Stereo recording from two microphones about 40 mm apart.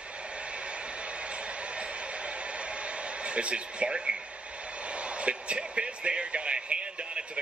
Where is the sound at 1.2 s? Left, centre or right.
Right.